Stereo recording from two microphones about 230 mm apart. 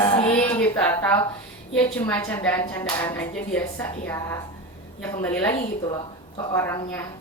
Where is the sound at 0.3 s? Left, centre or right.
Centre.